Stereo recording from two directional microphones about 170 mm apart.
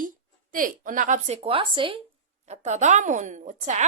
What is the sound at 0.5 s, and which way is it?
A woman's voice, 50° right (ahead or behind).